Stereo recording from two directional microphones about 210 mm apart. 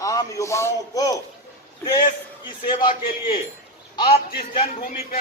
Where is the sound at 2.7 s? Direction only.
25° left (ahead or behind).